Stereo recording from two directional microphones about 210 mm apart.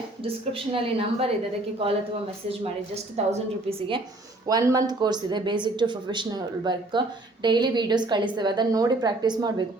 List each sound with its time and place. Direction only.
0.2 s speech: 25° right (ahead or behind)
2.5 s speech: 30° right (ahead or behind)